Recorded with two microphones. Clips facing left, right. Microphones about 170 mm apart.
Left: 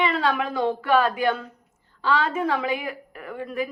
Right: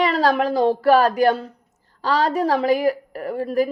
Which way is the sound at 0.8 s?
40° right (ahead or behind).